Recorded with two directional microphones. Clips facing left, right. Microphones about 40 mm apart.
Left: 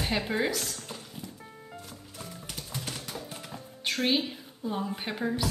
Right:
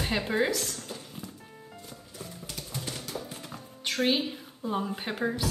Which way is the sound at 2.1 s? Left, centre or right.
Left.